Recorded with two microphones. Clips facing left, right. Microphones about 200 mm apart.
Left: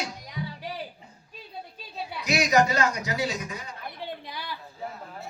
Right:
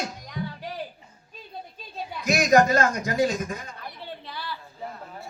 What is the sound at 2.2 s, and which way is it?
A man's voice, 50° right (ahead or behind).